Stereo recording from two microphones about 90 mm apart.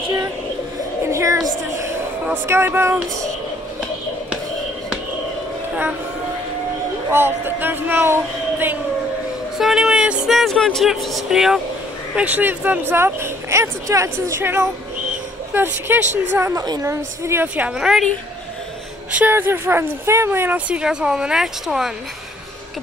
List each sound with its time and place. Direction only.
1.0 s a sound: 35° right (ahead or behind)
2.2 s speech: 25° right (ahead or behind)
7.1 s speech: 25° right (ahead or behind)
9.6 s speech: 5° right (ahead or behind)
12.2 s speech: 20° right (ahead or behind)
16.5 s a woman's voice: 50° right (ahead or behind)
16.8 s a woman's voice: 30° right (ahead or behind)
17.6 s speech: 10° right (ahead or behind)
19.1 s speech: 20° right (ahead or behind); by 21.9 s 5° right (ahead or behind)